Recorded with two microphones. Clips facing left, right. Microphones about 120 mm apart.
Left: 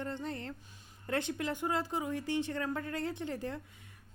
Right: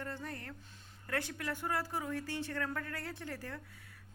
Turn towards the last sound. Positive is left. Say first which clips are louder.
# left 6 dB
turn(degrees=20)  # may be behind; listen again after turning